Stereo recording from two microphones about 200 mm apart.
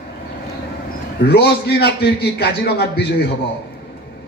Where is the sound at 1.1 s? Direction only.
55° left (ahead or behind).